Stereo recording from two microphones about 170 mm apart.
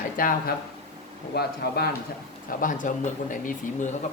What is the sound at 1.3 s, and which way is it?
Speech, 70° left (ahead or behind).